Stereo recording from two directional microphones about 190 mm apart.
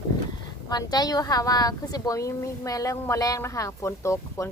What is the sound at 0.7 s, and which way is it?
A woman's voice, 20° left (ahead or behind).